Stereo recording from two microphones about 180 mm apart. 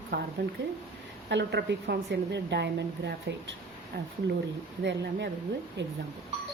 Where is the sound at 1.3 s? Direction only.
70° right (ahead or behind).